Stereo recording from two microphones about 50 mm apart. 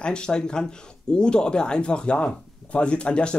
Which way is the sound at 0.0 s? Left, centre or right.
Centre.